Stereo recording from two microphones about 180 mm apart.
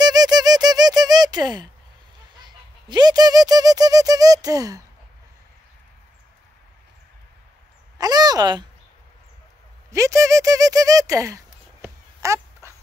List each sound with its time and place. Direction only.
0.0 s squeak: 20° right (ahead or behind)
2.3 s speech: 25° right (ahead or behind)
8.0 s a sound: 20° right (ahead or behind)
9.8 s speech: 15° right (ahead or behind)
11.8 s dog: 15° right (ahead or behind)